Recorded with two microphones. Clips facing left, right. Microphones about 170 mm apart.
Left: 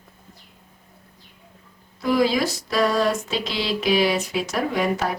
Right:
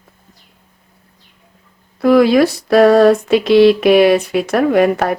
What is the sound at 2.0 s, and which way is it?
Speech, 65° right (ahead or behind).